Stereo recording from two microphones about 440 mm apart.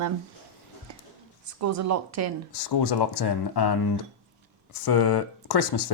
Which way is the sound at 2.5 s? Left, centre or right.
Left.